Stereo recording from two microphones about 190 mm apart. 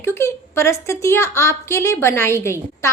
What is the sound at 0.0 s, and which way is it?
Speech, 15° left (ahead or behind).